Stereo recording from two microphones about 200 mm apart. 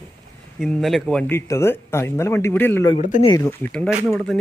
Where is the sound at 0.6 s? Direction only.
Centre (ahead or behind).